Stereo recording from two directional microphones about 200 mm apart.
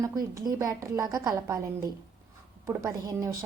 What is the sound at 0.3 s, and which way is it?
A woman's voice, 15° right (ahead or behind).